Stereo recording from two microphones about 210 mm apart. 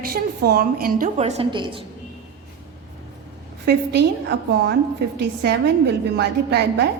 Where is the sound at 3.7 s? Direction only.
50° right (ahead or behind).